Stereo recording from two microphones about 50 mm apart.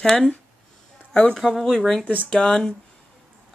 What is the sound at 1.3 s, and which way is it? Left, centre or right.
Speech, centre.